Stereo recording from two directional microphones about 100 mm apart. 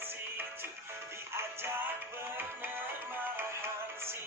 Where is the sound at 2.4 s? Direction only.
20° right (ahead or behind).